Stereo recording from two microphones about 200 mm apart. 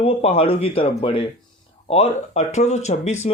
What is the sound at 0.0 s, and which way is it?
Speech, 30° left (ahead or behind).